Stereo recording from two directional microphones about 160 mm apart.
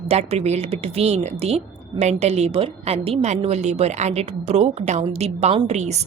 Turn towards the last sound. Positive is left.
turn(degrees=-45)  # may be behind; listen again after turning